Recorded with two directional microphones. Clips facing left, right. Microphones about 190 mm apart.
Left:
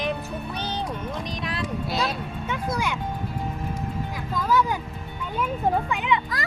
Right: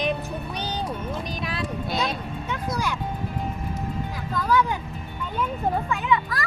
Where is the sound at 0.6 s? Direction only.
10° right (ahead or behind).